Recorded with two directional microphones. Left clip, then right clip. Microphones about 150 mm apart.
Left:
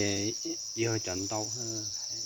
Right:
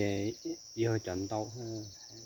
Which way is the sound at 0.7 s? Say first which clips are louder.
Left 1 dB; 15° right (ahead or behind).